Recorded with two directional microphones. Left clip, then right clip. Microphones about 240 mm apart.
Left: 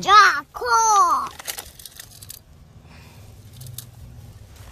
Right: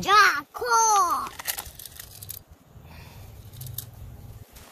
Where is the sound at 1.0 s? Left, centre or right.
Centre.